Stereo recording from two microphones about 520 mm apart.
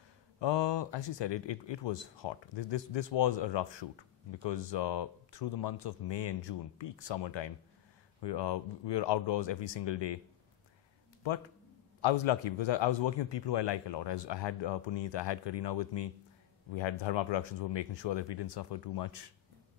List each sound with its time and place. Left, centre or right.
0.4 s speech: left
12.0 s speech: left